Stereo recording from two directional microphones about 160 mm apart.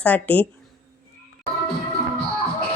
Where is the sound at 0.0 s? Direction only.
10° left (ahead or behind).